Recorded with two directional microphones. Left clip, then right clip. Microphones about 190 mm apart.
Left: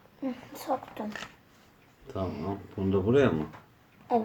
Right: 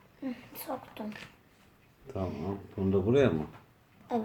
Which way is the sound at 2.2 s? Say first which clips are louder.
Left 3 dB; 10° left (ahead or behind).